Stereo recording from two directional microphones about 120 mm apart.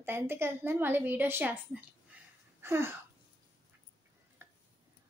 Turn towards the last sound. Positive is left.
turn(degrees=-20)  # may be behind; listen again after turning